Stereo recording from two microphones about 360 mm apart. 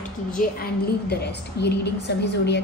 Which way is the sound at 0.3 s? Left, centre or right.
Left.